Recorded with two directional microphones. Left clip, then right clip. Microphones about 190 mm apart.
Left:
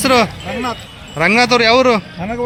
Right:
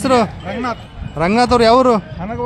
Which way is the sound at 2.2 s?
45° left (ahead or behind).